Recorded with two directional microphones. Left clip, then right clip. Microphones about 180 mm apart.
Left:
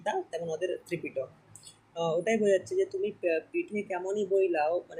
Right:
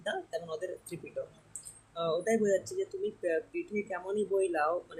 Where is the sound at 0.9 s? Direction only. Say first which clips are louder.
Left 6 dB; centre (ahead or behind).